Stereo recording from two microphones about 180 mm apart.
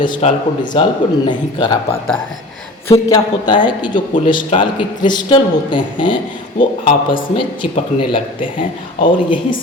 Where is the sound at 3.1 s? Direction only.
20° left (ahead or behind).